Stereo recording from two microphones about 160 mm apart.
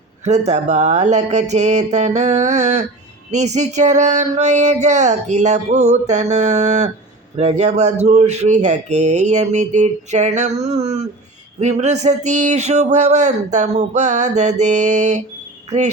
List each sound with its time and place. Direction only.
0.3 s a man's voice: 45° right (ahead or behind)